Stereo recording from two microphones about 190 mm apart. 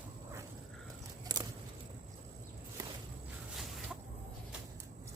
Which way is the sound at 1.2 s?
20° right (ahead or behind).